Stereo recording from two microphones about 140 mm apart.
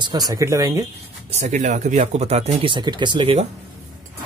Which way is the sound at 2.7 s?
35° right (ahead or behind).